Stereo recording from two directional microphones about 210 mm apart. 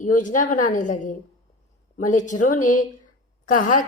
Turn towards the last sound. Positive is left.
turn(degrees=40)  # may be behind; listen again after turning